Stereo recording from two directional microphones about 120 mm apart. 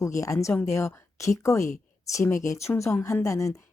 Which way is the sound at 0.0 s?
25° left (ahead or behind).